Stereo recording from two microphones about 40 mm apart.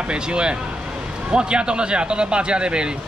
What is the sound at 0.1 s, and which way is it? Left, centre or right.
Speech, right.